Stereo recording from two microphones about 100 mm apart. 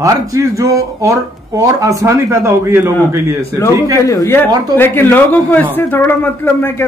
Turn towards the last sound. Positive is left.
turn(degrees=20)  # may be behind; listen again after turning